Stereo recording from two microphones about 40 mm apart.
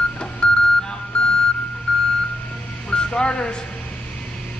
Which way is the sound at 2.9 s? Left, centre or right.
Left.